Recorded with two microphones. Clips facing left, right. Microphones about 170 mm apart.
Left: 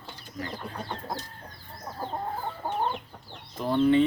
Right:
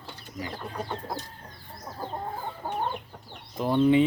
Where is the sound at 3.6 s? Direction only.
15° right (ahead or behind).